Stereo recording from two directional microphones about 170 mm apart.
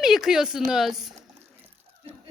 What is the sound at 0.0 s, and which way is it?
A woman's voice, centre (ahead or behind).